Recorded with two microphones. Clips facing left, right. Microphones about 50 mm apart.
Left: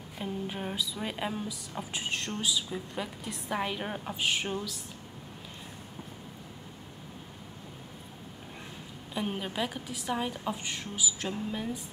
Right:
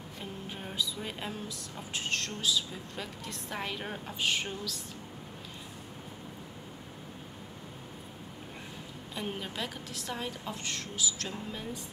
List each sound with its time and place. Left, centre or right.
0.2 s a woman's voice: centre
9.1 s a woman's voice: centre